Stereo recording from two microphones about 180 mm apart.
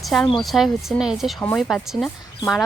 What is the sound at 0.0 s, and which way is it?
A woman's voice, centre (ahead or behind).